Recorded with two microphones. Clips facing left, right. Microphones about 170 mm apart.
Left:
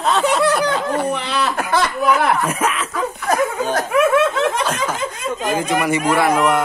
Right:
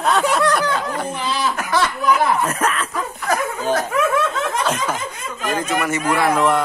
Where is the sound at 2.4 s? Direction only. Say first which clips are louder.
Left 1 dB; 10° left (ahead or behind).